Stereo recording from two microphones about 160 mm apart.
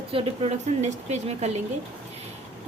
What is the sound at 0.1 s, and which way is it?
A woman's voice, 35° right (ahead or behind).